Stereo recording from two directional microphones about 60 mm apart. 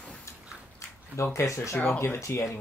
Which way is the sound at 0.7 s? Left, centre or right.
Left.